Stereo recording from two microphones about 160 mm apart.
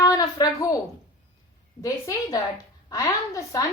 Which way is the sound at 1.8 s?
20° left (ahead or behind).